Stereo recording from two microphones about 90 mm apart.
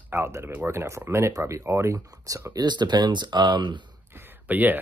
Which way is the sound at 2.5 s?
55° right (ahead or behind).